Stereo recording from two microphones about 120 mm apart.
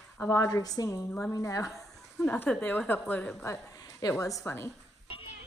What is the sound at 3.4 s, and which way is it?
A woman's voice, 25° left (ahead or behind).